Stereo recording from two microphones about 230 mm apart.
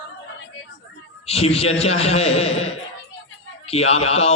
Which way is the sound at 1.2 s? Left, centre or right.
Left.